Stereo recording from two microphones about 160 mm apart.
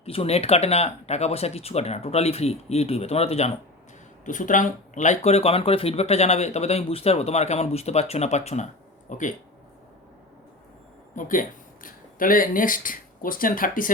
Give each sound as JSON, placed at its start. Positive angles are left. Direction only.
{"t": 0.0, "sound": "speech", "side_deg": 40}
{"t": 4.3, "sound": "speech", "side_deg": 55}
{"t": 11.1, "sound": "speech", "side_deg": 55}